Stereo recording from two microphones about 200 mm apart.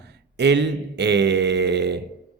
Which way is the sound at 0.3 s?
60° right (ahead or behind).